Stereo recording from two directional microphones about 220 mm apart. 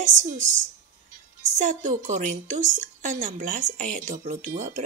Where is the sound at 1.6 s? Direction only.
35° right (ahead or behind).